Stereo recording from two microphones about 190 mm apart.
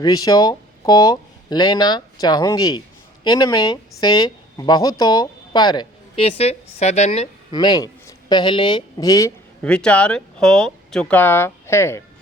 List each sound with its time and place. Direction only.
0.0 s speech: 20° left (ahead or behind)
7.5 s speech: 20° left (ahead or behind)
9.6 s speech: 5° left (ahead or behind)